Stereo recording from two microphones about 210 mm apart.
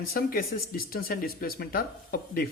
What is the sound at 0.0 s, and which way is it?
Speech, 45° left (ahead or behind).